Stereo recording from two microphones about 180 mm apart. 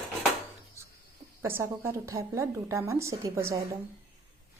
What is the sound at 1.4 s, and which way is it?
Speech, 10° right (ahead or behind).